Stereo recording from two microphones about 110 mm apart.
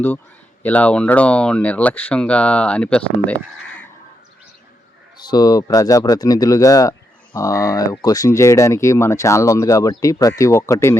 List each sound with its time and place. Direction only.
0.6 s speech: 15° left (ahead or behind)
5.3 s speech: 35° left (ahead or behind)